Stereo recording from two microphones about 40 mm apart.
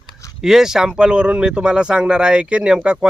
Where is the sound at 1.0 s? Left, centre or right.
Right.